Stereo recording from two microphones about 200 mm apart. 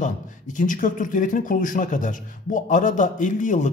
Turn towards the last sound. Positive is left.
turn(degrees=40)  # may be behind; listen again after turning